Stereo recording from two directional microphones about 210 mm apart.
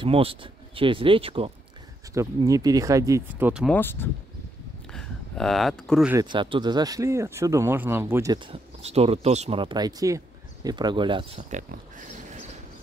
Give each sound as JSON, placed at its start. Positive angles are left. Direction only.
{"t": 0.0, "sound": "speech", "side_deg": -25}
{"t": 2.1, "sound": "speech", "side_deg": -15}
{"t": 3.6, "sound": "speech", "side_deg": 10}
{"t": 6.1, "sound": "speech", "side_deg": -20}